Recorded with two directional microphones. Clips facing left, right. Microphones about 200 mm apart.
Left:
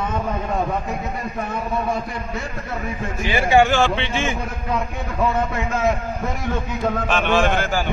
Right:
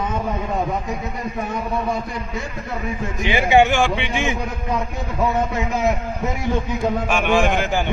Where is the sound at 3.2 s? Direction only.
20° right (ahead or behind).